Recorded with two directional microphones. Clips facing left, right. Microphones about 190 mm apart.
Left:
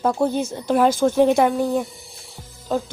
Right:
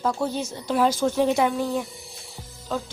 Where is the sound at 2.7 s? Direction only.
50° left (ahead or behind).